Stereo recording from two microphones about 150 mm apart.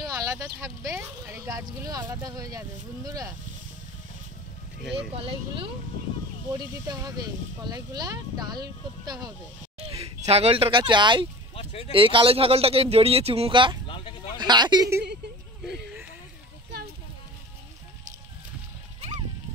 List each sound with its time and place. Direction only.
0.0 s speech: 20° right (ahead or behind)
5.1 s speech: 35° right (ahead or behind)
6.5 s speech: 25° right (ahead or behind)
9.8 s speech: 40° right (ahead or behind)
11.5 s speech: 40° left (ahead or behind)
11.9 s speech: 35° right (ahead or behind)
13.8 s a sound: 30° left (ahead or behind)
14.4 s speech: 30° right (ahead or behind)